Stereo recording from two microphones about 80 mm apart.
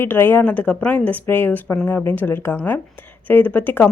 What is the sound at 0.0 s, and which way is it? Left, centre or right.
Speech, left.